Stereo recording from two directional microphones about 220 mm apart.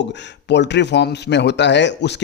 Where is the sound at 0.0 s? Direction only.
50° left (ahead or behind).